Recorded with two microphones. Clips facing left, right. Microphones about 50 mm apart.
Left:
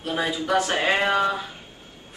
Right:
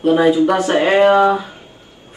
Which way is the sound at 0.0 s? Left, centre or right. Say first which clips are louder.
Right 14 dB; right.